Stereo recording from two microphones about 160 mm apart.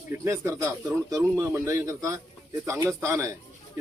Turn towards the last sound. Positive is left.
turn(degrees=-20)  # may be behind; listen again after turning